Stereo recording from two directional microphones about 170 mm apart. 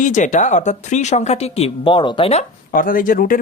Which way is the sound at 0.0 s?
45° left (ahead or behind).